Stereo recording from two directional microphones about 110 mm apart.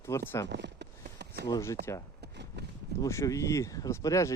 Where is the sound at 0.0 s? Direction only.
25° left (ahead or behind).